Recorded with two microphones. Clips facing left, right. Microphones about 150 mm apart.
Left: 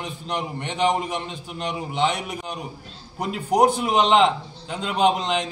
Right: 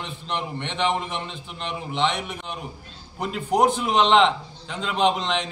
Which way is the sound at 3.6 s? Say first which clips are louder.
Left 2 dB; 40° left (ahead or behind).